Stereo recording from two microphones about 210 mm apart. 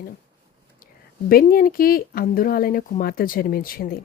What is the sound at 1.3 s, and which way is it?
Speech, 45° left (ahead or behind).